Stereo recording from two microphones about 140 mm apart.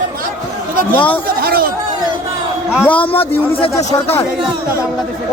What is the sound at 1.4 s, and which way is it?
Chatter, 90° right.